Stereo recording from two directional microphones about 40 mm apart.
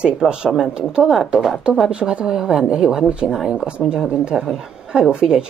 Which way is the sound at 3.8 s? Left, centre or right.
Left.